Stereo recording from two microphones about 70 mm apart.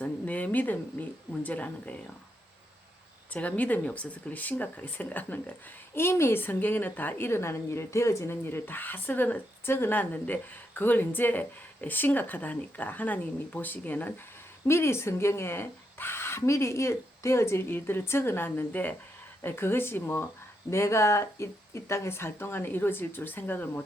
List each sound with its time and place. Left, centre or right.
0.0 s speech: left
3.3 s speech: left
14.7 s speech: left
20.7 s speech: left